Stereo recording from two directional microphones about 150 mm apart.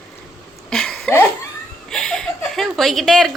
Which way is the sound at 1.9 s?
5° left (ahead or behind).